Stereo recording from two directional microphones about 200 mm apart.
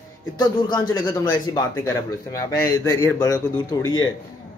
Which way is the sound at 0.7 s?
20° left (ahead or behind).